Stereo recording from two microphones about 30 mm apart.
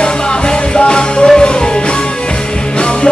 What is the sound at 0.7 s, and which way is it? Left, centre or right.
Music, left.